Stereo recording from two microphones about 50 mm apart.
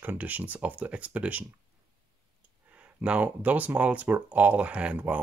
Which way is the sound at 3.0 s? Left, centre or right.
Right.